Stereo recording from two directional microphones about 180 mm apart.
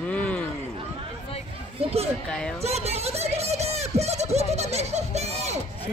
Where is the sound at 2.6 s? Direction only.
35° right (ahead or behind).